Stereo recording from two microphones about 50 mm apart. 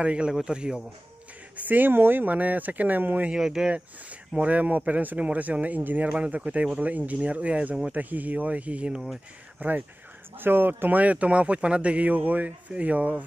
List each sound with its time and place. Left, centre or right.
0.0 s speech: right
1.6 s a man's voice: right
3.3 s speech: centre
4.4 s a man's voice: right
6.0 s a man's voice: right
10.3 s a man's voice: right